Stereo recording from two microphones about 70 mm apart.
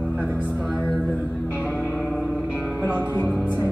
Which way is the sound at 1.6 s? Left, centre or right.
Left.